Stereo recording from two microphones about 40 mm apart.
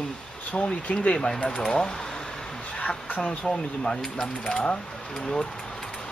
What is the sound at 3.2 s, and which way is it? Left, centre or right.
Mechanisms, left.